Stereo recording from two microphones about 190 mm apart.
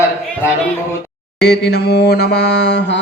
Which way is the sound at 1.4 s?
60° left (ahead or behind).